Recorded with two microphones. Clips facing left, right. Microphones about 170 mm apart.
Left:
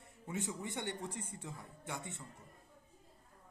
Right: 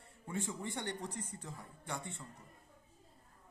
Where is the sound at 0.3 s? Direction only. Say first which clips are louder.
Right 1 dB; 15° left (ahead or behind).